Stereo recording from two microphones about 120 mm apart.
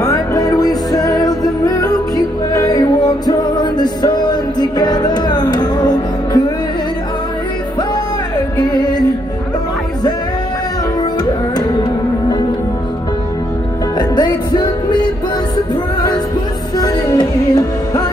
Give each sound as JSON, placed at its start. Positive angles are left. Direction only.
{"t": 0.0, "sound": "music", "side_deg": 30}
{"t": 8.5, "sound": "music", "side_deg": 35}
{"t": 11.0, "sound": "music", "side_deg": 35}
{"t": 13.9, "sound": "music", "side_deg": 35}